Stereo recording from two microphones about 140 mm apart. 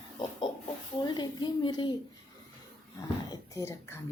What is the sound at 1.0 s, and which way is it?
Speech, 30° left (ahead or behind).